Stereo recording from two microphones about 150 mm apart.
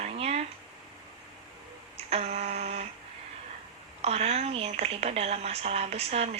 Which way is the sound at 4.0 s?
45° right (ahead or behind).